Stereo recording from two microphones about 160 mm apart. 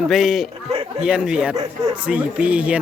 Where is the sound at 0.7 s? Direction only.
40° right (ahead or behind).